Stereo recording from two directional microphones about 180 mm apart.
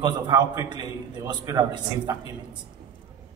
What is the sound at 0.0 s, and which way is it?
A man's voice, 20° right (ahead or behind).